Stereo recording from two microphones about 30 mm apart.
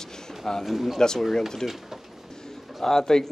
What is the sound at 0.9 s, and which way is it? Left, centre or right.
Speech, centre.